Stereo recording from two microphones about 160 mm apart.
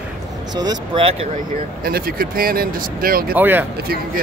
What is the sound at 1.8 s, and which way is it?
Speech, 65° right (ahead or behind).